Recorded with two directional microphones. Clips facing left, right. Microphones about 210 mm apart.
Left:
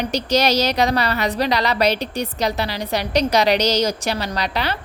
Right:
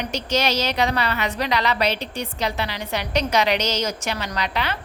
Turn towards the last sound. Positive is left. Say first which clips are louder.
# left 3 dB
turn(degrees=35)  # may be behind; listen again after turning